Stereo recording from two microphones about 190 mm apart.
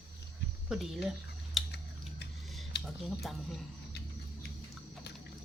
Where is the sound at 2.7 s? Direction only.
60° left (ahead or behind).